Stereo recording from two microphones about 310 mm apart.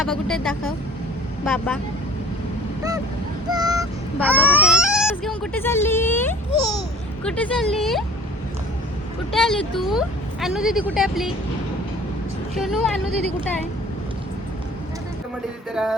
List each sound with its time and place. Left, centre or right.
0.0 s speech: centre
3.5 s speech: centre
9.3 s speech: centre
12.5 s speech: centre
15.7 s speech: centre